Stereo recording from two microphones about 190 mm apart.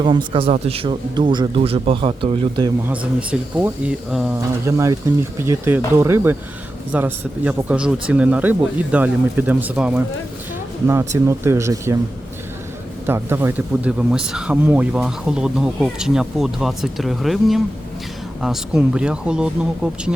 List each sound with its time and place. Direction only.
0.0 s speech: 25° right (ahead or behind)
2.9 s speech: 5° right (ahead or behind)
4.6 s speech: 15° right (ahead or behind)
11.3 s speech: 15° right (ahead or behind)
13.1 s speech: 10° right (ahead or behind)